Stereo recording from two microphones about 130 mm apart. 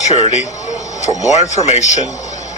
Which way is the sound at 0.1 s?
55° left (ahead or behind).